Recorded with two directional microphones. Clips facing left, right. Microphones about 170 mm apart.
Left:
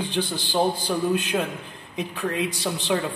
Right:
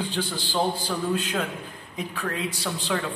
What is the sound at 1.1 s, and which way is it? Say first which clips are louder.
A man's voice: left 3 dB; 20° left (ahead or behind).